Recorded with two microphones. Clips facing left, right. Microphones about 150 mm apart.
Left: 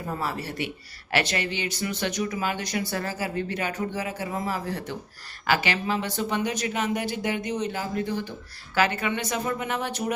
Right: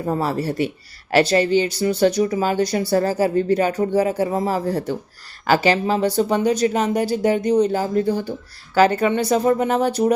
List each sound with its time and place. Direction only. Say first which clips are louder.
0.0 s speech: right 9 dB; 35° right (ahead or behind)